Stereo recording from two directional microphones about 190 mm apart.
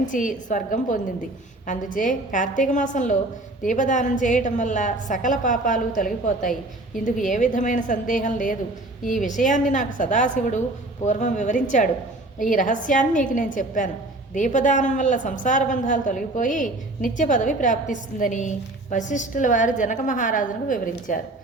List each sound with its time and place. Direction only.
0.0 s a woman's voice: 40° left (ahead or behind)